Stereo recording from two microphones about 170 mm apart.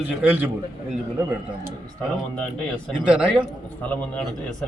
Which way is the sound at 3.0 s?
5° right (ahead or behind).